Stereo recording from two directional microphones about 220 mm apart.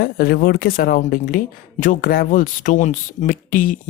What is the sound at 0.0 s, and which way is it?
Speech, 45° left (ahead or behind).